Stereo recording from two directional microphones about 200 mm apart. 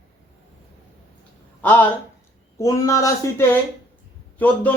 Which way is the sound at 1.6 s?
10° left (ahead or behind).